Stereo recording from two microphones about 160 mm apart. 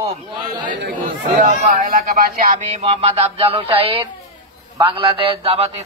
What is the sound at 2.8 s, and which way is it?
A man's voice, 40° right (ahead or behind).